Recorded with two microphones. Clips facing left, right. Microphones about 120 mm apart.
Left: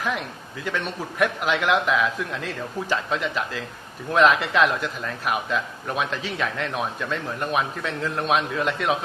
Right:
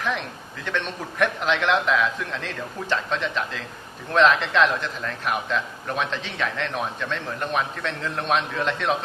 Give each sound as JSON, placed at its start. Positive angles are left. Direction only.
{"t": 0.0, "sound": "a man's voice", "side_deg": 5}